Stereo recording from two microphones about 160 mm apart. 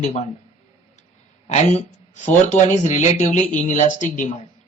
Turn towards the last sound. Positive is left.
turn(degrees=50)  # may be behind; listen again after turning